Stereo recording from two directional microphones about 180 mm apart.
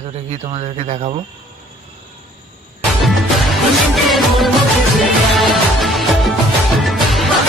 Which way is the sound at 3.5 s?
Centre (ahead or behind).